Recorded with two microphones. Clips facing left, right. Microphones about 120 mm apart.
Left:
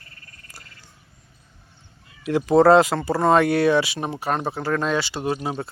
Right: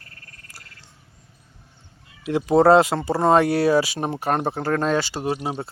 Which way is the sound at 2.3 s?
30° right (ahead or behind).